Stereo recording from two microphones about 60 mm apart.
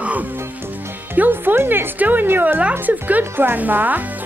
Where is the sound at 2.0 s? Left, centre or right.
Right.